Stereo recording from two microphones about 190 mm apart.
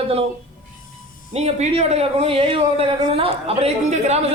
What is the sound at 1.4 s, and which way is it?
Speech, 35° right (ahead or behind).